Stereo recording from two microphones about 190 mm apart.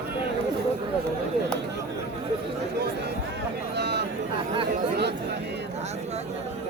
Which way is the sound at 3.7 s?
60° right (ahead or behind).